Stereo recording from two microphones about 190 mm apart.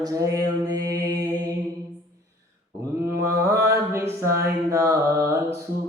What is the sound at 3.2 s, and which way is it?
Mantra, 15° right (ahead or behind).